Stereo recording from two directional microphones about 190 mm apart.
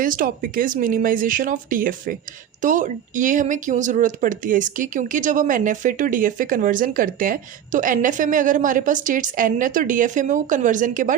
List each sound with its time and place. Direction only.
0.0 s speech: 45° right (ahead or behind)